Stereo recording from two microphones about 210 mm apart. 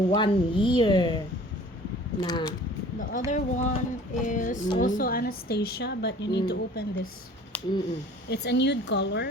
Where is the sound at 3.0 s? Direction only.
40° left (ahead or behind).